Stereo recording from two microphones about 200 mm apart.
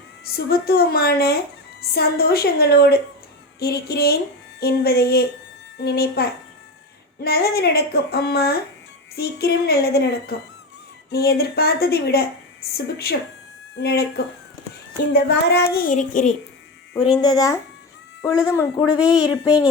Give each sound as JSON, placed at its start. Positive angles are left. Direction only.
{"t": 0.3, "sound": "speech", "side_deg": 50}
{"t": 15.1, "sound": "speech", "side_deg": 55}
{"t": 17.0, "sound": "speech", "side_deg": 20}
{"t": 18.9, "sound": "speech", "side_deg": -5}